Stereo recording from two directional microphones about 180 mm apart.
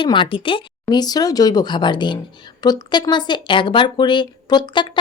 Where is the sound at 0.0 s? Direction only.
25° left (ahead or behind).